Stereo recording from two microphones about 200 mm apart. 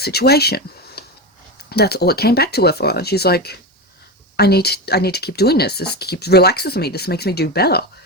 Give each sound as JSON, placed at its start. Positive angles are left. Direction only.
{"t": 0.0, "sound": "speech", "side_deg": 55}